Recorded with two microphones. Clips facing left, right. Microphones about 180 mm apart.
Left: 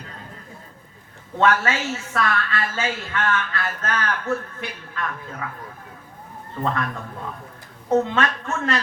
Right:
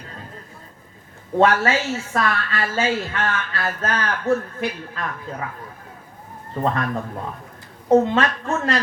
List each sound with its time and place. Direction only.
1.4 s a woman's voice: 35° right (ahead or behind)
6.6 s a woman's voice: 35° right (ahead or behind)
7.9 s a woman's voice: 35° right (ahead or behind)